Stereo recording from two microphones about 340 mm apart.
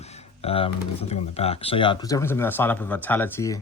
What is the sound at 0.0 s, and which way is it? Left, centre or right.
Speech, centre.